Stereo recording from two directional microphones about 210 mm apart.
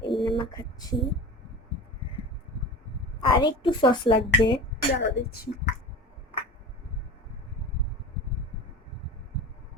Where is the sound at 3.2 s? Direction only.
20° left (ahead or behind).